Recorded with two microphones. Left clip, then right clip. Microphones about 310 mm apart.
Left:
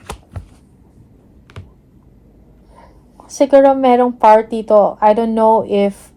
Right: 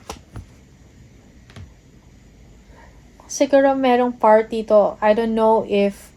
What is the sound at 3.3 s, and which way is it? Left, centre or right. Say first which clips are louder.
Speech: left 6 dB; left.